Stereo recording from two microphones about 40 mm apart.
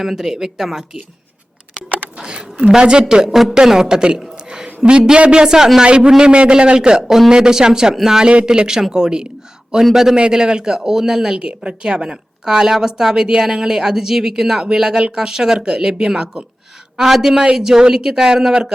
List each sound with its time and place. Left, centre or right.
0.0 s speech: centre
2.1 s a sound: right
2.7 s a man's voice: right
5.8 s a man's voice: right
8.3 s a man's voice: right
11.3 s a man's voice: right